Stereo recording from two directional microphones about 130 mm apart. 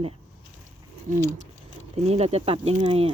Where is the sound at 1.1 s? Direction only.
75° right (ahead or behind).